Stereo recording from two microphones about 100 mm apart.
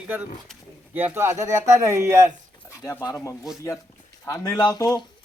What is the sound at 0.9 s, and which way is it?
Speech, 20° right (ahead or behind).